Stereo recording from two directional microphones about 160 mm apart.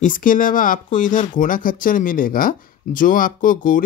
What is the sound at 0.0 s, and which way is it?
Speech, 55° left (ahead or behind).